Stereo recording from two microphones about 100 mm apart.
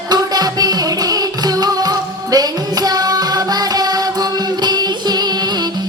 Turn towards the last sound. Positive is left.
turn(degrees=-45)  # may be behind; listen again after turning